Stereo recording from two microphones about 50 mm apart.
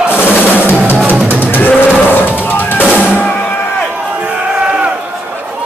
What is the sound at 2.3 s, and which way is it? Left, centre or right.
Drum, left.